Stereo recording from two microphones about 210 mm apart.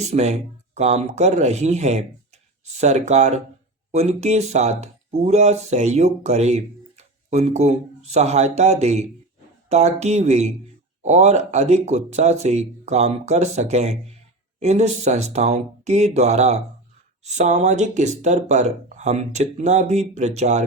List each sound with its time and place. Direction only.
0.0 s speech: 30° right (ahead or behind)